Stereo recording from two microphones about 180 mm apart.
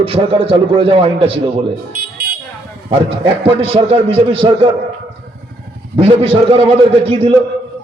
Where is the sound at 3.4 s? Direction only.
30° right (ahead or behind).